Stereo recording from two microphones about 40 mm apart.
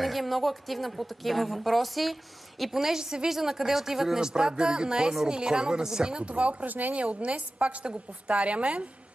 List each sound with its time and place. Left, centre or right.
0.0 s a woman's voice: centre
6.2 s a woman's voice: right
6.7 s a woman's voice: right
7.0 s a woman's voice: right